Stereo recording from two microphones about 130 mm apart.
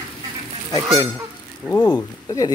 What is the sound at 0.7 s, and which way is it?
Goose, 30° left (ahead or behind).